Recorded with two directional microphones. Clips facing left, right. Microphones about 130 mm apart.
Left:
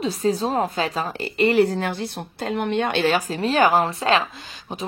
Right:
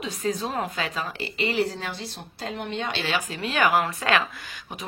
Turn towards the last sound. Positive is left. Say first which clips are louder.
# left 4 dB
turn(degrees=25)  # may be behind; listen again after turning